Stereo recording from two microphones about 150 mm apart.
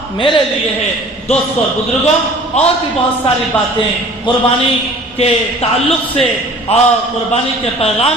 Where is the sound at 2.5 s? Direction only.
45° left (ahead or behind).